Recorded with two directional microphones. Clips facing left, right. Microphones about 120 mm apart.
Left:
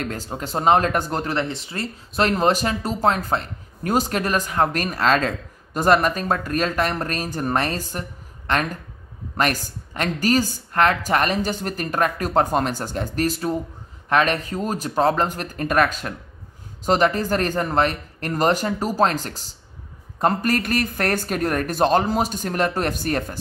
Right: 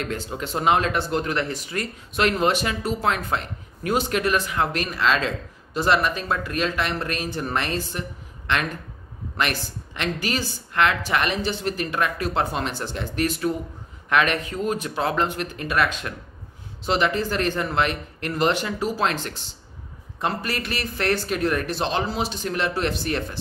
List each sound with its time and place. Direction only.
0.0 s speech: 40° left (ahead or behind)